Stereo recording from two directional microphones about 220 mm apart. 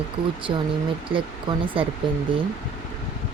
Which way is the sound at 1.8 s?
25° right (ahead or behind).